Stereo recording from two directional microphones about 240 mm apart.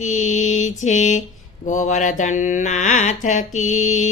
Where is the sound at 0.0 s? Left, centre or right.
Left.